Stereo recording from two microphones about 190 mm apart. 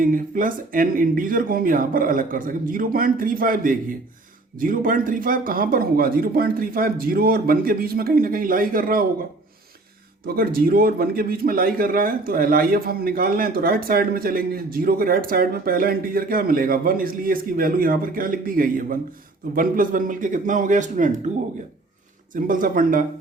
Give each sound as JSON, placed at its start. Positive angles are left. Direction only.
{"t": 0.0, "sound": "a man's voice", "side_deg": -45}
{"t": 10.2, "sound": "a man's voice", "side_deg": -50}
{"t": 22.4, "sound": "a man's voice", "side_deg": -45}